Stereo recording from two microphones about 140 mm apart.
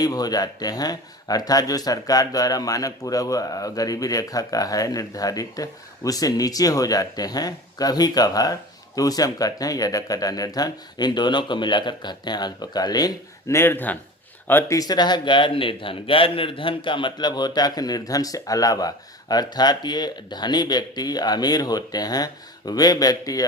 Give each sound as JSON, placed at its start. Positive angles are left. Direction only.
{"t": 0.0, "sound": "a man's voice", "side_deg": 30}
{"t": 13.6, "sound": "speech", "side_deg": 15}
{"t": 14.8, "sound": "a man's voice", "side_deg": 30}